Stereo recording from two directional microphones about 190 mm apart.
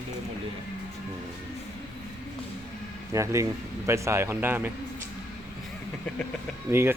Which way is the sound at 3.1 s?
15° right (ahead or behind).